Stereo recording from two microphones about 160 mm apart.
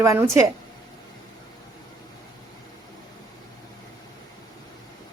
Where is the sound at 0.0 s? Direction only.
20° right (ahead or behind).